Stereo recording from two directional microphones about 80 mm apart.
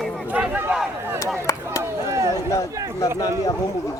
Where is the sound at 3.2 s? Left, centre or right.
Left.